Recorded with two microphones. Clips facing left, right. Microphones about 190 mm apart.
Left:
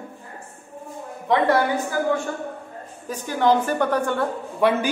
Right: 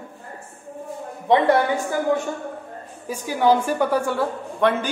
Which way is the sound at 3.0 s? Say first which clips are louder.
Right 1 dB; 10° right (ahead or behind).